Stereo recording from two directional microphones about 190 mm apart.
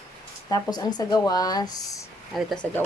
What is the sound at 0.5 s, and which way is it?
Speech, 20° left (ahead or behind).